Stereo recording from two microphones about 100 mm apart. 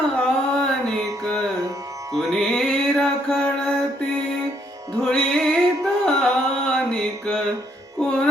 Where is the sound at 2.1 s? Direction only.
5° left (ahead or behind).